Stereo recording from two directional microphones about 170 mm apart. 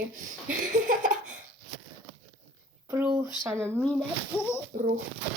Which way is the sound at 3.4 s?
15° right (ahead or behind).